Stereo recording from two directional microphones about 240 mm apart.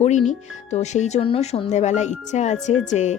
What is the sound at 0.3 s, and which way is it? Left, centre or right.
Speech, left.